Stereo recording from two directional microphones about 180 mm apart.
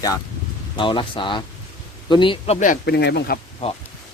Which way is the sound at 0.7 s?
25° left (ahead or behind).